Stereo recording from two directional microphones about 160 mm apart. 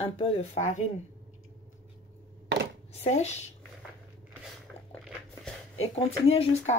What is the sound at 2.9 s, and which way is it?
Speech, 45° left (ahead or behind).